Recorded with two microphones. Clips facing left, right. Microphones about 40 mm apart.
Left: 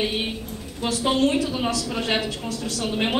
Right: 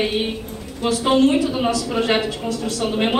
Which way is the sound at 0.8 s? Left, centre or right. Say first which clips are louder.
Right 5 dB; right.